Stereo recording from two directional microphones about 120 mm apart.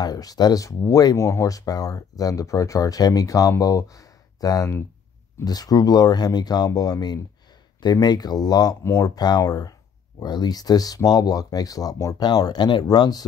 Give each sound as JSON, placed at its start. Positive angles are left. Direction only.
{"t": 0.0, "sound": "speech", "side_deg": 30}